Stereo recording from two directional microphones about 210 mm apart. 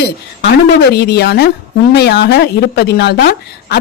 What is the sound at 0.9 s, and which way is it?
A woman's voice, 50° left (ahead or behind).